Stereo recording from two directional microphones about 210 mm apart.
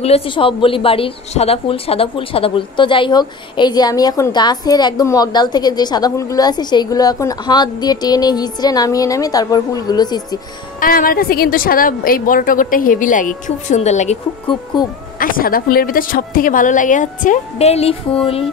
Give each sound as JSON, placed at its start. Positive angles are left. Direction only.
{"t": 0.0, "sound": "a woman's voice", "side_deg": 25}
{"t": 10.8, "sound": "a woman's voice", "side_deg": 40}
{"t": 14.7, "sound": "a woman's voice", "side_deg": 20}
{"t": 15.1, "sound": "a woman's voice", "side_deg": 45}